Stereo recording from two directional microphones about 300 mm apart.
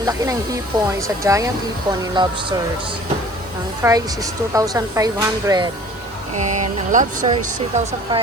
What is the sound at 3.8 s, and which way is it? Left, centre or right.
Speech, centre.